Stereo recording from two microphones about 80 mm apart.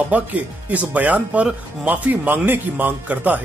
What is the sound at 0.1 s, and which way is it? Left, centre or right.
Speech, centre.